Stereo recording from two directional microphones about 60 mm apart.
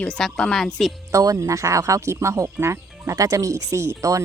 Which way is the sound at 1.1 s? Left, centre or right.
Right.